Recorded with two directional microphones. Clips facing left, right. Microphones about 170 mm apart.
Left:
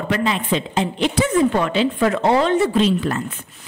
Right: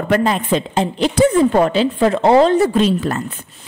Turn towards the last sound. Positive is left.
turn(degrees=-40)  # may be behind; listen again after turning